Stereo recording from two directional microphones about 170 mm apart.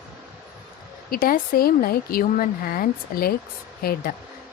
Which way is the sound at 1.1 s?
60° left (ahead or behind).